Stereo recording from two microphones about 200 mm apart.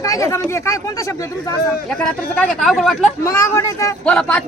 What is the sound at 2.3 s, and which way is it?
Speech, 5° left (ahead or behind).